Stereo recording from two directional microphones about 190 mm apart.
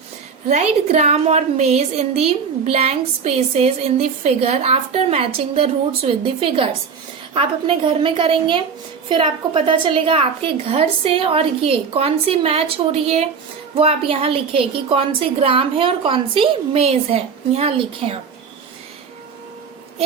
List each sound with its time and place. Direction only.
0.4 s a woman's voice: 35° right (ahead or behind)